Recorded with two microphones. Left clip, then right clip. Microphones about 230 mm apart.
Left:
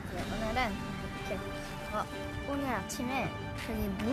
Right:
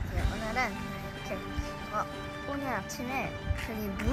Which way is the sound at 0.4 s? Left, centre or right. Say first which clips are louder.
Right 1 dB; centre.